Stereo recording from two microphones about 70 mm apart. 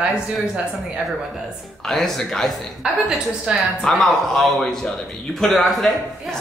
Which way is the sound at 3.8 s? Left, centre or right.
Centre.